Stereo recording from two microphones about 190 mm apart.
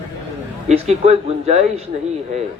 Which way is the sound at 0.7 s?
35° right (ahead or behind).